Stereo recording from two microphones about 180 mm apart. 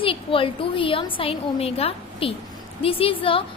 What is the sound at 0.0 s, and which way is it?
A woman's voice, 30° left (ahead or behind).